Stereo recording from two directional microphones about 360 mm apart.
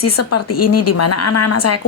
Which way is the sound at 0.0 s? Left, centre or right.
Left.